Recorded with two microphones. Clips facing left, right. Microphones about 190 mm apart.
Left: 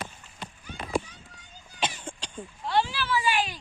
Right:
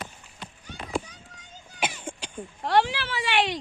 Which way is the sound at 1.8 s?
10° right (ahead or behind).